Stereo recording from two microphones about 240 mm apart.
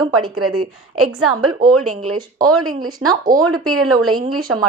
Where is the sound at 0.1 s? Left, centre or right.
Right.